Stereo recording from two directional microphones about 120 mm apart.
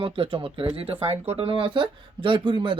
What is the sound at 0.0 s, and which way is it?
Speech, 50° right (ahead or behind).